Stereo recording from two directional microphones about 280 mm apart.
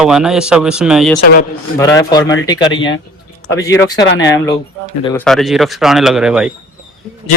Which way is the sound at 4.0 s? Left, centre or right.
Left.